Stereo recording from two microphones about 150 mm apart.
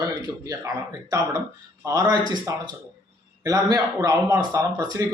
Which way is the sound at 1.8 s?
25° right (ahead or behind).